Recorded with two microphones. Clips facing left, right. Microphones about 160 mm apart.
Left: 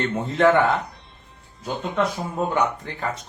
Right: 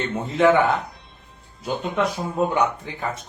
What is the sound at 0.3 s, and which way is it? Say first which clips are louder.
Speech: right 1 dB; centre (ahead or behind).